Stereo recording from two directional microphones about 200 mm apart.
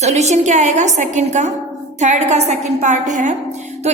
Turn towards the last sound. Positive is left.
turn(degrees=-40)  # may be behind; listen again after turning